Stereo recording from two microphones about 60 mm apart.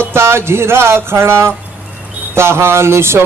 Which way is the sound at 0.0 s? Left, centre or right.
Right.